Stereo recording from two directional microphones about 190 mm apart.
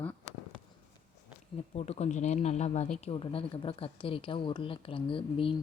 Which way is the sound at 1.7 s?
35° left (ahead or behind).